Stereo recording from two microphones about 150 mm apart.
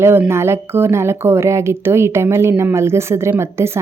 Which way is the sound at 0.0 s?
15° right (ahead or behind).